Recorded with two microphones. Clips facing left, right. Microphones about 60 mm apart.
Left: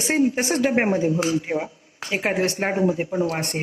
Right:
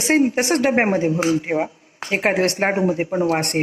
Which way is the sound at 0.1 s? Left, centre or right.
Right.